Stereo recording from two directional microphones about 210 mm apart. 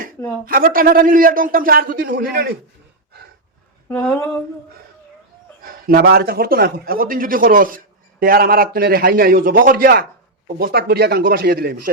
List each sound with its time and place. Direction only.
0.4 s a man's voice: 45° right (ahead or behind)
3.8 s speech: 10° left (ahead or behind)
5.6 s a man's voice: 45° right (ahead or behind)